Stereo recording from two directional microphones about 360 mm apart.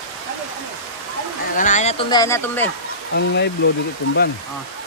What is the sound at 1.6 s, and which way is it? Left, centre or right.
Speech, centre.